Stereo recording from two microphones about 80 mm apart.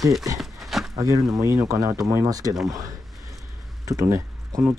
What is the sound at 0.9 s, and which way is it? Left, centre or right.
Speech, right.